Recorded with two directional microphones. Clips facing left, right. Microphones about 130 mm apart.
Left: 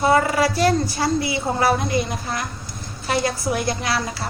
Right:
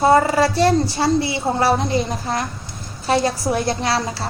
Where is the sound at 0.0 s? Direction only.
30° right (ahead or behind).